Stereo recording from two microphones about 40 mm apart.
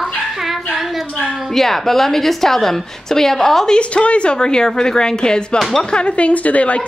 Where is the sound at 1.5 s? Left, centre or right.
Centre.